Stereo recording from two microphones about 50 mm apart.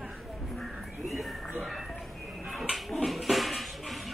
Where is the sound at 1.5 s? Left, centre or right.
Centre.